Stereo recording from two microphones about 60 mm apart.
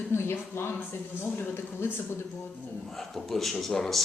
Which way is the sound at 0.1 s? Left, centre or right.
Left.